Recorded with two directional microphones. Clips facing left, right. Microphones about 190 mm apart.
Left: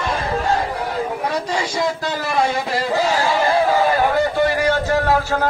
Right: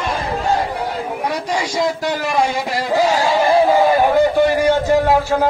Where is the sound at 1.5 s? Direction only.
15° right (ahead or behind).